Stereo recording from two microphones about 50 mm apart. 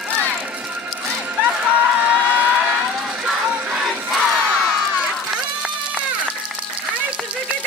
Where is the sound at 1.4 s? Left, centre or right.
Right.